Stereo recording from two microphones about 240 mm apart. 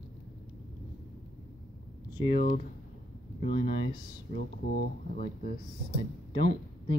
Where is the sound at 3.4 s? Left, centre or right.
Left.